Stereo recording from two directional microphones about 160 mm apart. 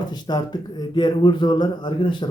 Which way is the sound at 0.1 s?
25° left (ahead or behind).